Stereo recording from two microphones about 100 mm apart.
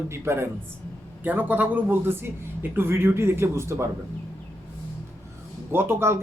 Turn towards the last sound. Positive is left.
turn(degrees=-25)  # may be behind; listen again after turning